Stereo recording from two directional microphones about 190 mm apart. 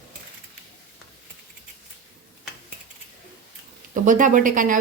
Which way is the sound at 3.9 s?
45° right (ahead or behind).